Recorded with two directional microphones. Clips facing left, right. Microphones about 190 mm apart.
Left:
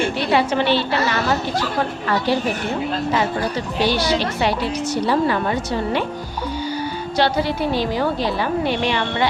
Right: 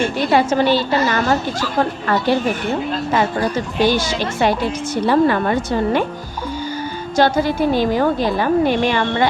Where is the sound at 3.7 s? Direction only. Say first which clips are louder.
Right 1 dB; 45° right (ahead or behind).